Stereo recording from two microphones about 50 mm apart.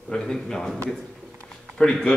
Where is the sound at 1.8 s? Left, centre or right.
Centre.